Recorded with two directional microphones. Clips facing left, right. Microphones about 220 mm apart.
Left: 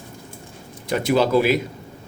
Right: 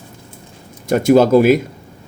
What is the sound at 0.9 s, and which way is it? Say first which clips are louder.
Speech: right 8 dB; 45° right (ahead or behind).